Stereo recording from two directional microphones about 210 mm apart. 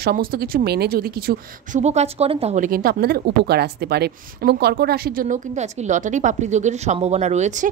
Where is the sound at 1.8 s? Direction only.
30° right (ahead or behind).